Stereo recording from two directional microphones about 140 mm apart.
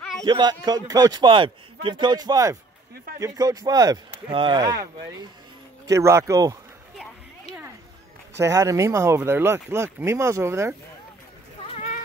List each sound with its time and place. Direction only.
0.2 s a man's voice: 30° right (ahead or behind)
5.9 s speech: 20° right (ahead or behind)
8.4 s speech: 20° right (ahead or behind)
11.7 s a sound: 55° left (ahead or behind)